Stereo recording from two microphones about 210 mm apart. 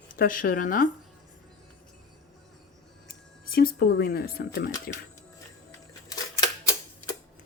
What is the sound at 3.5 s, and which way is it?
Speech, 45° left (ahead or behind).